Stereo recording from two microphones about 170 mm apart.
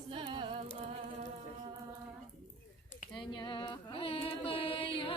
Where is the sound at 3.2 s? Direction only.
25° left (ahead or behind).